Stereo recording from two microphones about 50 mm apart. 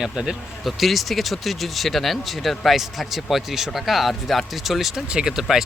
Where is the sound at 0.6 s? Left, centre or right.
Centre.